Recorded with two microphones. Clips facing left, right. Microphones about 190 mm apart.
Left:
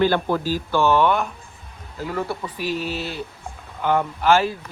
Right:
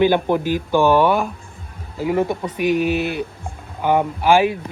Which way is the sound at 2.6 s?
60° right (ahead or behind).